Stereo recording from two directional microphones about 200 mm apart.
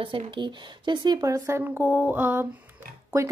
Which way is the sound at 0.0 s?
25° right (ahead or behind).